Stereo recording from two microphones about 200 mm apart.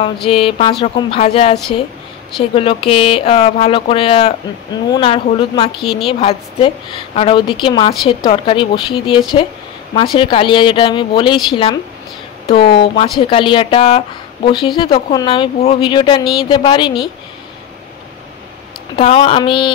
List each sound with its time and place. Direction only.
0.3 s a woman's voice: 30° left (ahead or behind)
18.9 s speech: 25° left (ahead or behind)